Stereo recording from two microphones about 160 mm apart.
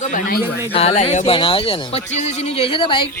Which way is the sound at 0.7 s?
40° left (ahead or behind).